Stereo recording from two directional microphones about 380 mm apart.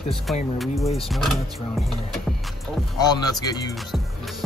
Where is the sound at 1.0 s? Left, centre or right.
Centre.